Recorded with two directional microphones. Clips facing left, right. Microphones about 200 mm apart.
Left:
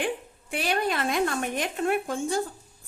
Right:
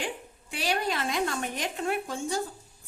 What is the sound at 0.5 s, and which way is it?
A woman's voice, 55° left (ahead or behind).